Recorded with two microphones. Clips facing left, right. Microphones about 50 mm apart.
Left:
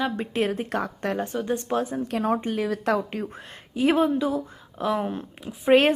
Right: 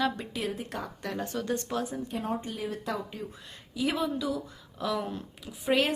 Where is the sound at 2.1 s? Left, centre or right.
Left.